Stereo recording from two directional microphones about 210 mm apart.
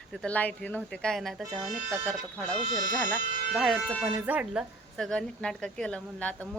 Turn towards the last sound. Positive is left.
turn(degrees=5)  # may be behind; listen again after turning